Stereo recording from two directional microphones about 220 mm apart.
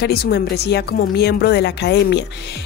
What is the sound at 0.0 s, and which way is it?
A woman's voice, 50° left (ahead or behind).